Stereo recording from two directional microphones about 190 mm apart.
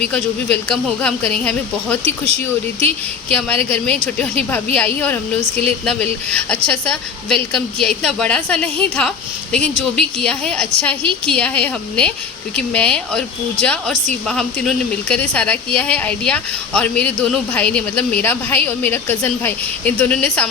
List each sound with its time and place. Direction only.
0.0 s speech: 5° left (ahead or behind)
2.0 s speech: 35° right (ahead or behind)
2.8 s a woman's voice: 5° left (ahead or behind)